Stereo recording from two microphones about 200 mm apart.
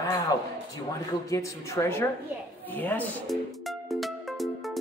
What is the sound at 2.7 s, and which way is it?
Music, 10° left (ahead or behind).